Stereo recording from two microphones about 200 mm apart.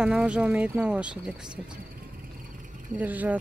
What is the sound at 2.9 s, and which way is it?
Speech, 10° right (ahead or behind).